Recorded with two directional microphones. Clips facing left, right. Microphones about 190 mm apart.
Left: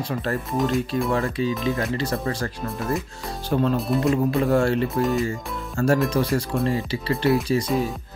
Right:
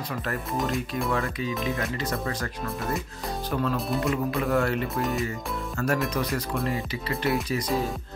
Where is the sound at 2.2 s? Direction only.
30° left (ahead or behind).